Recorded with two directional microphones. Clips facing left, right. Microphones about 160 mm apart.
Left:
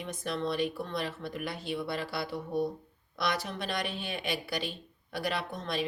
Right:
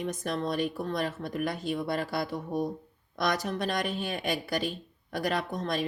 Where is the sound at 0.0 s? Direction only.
45° right (ahead or behind).